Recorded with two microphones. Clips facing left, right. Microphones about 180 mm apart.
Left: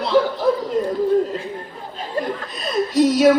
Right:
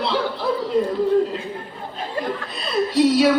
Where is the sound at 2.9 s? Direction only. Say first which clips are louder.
Left 1 dB; 45° left (ahead or behind).